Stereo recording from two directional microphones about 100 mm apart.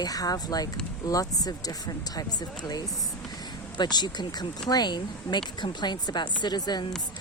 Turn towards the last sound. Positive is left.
turn(degrees=45)  # may be behind; listen again after turning